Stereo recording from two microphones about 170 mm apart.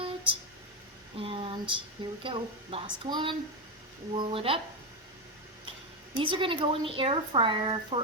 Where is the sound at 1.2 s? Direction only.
30° right (ahead or behind).